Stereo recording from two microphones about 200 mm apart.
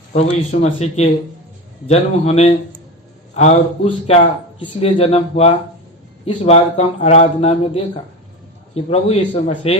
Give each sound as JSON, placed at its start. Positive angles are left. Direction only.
{"t": 0.6, "sound": "speech", "side_deg": 30}